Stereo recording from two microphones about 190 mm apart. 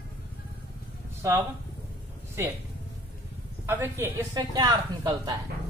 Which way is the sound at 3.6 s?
10° right (ahead or behind).